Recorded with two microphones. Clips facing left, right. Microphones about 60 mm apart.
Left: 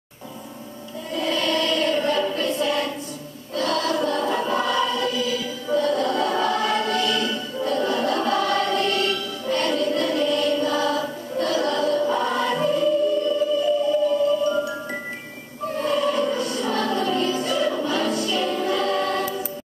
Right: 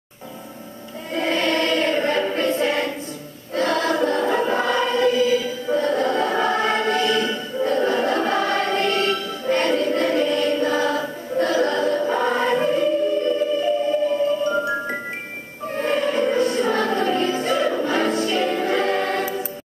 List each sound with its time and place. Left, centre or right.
1.1 s choir: right
7.6 s music: right